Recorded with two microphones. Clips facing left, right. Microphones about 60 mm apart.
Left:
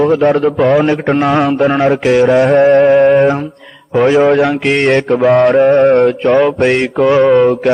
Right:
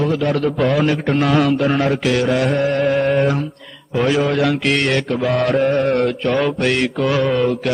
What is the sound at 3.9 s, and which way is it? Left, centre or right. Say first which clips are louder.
Mantra: left 8 dB; left.